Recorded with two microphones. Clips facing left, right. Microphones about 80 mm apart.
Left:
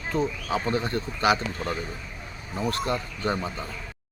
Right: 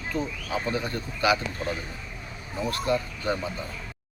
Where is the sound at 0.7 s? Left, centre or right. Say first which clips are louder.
Left 3 dB; left.